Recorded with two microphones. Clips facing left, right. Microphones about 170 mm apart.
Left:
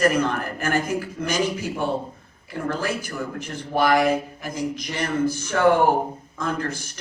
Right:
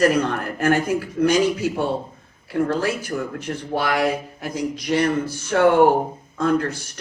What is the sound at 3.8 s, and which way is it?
Speech, 60° right (ahead or behind).